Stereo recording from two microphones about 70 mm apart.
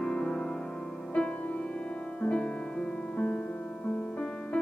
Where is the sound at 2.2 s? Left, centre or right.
Centre.